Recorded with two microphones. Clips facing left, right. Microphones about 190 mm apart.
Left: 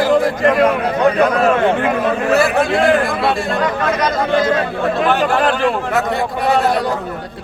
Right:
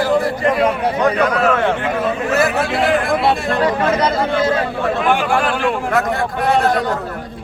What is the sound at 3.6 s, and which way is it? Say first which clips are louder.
Speech: right 3 dB; 30° right (ahead or behind).